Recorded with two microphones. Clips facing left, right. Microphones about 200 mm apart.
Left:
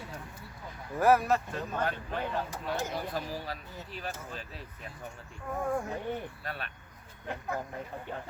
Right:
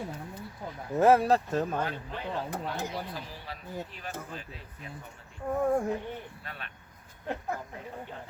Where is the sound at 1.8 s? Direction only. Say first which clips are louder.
Left 2 dB; 50° left (ahead or behind).